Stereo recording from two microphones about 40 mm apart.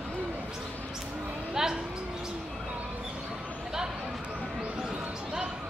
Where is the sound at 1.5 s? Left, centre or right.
Centre.